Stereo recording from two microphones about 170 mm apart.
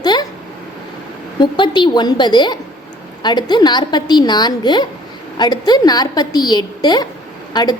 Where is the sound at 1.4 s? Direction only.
25° left (ahead or behind).